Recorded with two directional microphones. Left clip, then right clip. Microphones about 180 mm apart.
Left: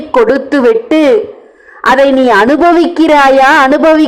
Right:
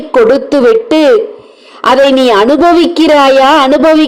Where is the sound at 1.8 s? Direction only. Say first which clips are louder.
Right 1 dB; 10° right (ahead or behind).